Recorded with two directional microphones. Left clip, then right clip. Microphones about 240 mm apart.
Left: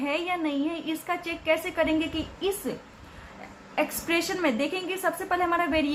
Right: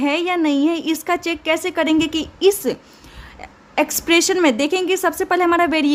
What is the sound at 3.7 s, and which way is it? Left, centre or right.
A woman's voice, right.